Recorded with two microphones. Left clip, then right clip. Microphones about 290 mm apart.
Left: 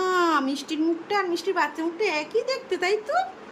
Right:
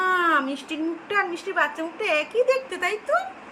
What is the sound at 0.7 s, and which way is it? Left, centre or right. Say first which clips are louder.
A woman's voice: left 4 dB; centre.